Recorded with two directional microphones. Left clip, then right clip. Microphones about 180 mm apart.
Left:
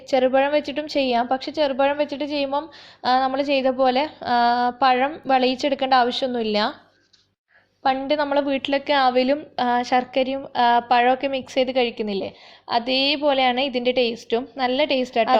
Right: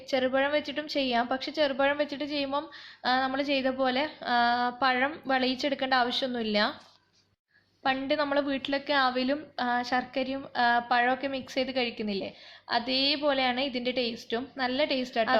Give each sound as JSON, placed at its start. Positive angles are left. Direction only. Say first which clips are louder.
{"t": 0.1, "sound": "a woman's voice", "louder": "left 8 dB", "side_deg": 30}
{"t": 7.9, "sound": "a woman's voice", "louder": "left 7 dB", "side_deg": 25}